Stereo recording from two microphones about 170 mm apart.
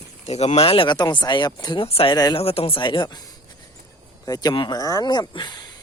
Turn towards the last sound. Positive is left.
turn(degrees=25)  # may be behind; listen again after turning